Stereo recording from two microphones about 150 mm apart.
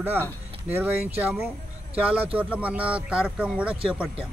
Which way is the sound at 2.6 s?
10° right (ahead or behind).